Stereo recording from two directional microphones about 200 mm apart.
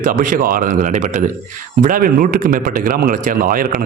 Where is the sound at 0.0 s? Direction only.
40° right (ahead or behind).